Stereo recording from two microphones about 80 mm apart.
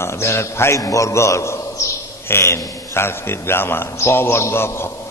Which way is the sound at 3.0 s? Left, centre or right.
Left.